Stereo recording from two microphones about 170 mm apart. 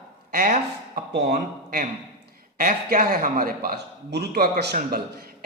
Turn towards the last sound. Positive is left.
turn(degrees=-65)  # may be behind; listen again after turning